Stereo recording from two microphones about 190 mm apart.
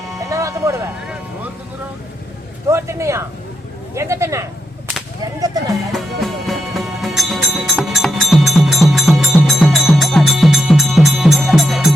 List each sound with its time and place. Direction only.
0.2 s music: 15° right (ahead or behind)
2.6 s speech: 15° right (ahead or behind)
5.9 s music: centre (ahead or behind)